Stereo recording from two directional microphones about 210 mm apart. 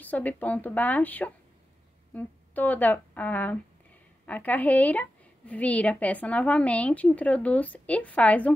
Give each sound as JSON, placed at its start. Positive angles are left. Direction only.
{"t": 0.0, "sound": "a woman's voice", "side_deg": 5}